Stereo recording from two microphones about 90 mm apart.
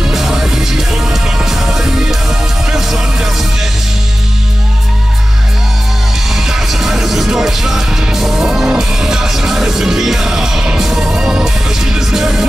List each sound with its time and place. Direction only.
0.0 s music: 5° right (ahead or behind)
6.3 s music: 5° right (ahead or behind)